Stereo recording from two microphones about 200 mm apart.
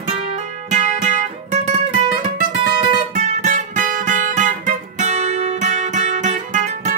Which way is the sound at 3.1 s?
40° right (ahead or behind).